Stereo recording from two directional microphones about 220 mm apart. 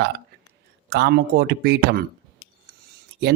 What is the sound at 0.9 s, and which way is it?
A man's voice, 50° right (ahead or behind).